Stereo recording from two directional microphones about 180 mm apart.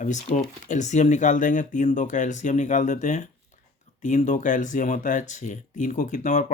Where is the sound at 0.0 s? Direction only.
45° left (ahead or behind).